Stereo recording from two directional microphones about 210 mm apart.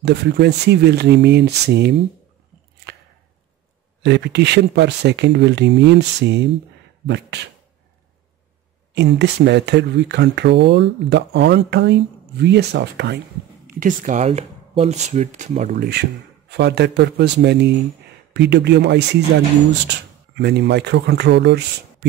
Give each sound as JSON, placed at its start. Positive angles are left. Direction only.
{"t": 0.0, "sound": "speech", "side_deg": -55}
{"t": 4.0, "sound": "speech", "side_deg": -55}
{"t": 8.9, "sound": "speech", "side_deg": -55}
{"t": 13.7, "sound": "speech", "side_deg": -40}